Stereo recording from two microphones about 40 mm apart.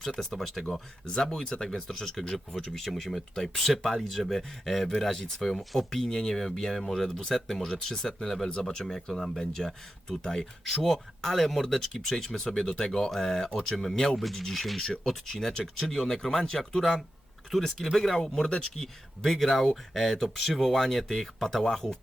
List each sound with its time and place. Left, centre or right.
0.0 s speech: centre
8.4 s speech: centre
18.2 s speech: centre
19.3 s speech: centre